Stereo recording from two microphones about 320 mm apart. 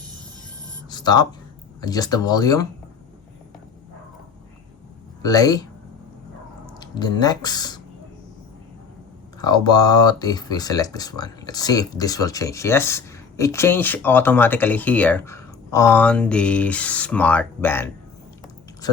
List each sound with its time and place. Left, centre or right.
0.9 s a sound: centre
1.8 s speech: centre
5.2 s speech: centre
6.7 s speech: centre
9.4 s speech: centre